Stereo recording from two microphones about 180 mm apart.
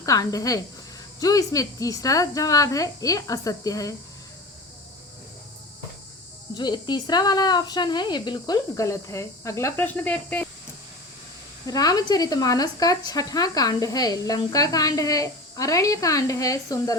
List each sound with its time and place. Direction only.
0.0 s speech: 20° left (ahead or behind)
6.5 s speech: 25° left (ahead or behind); by 10.5 s 10° left (ahead or behind)
11.6 s speech: 20° left (ahead or behind)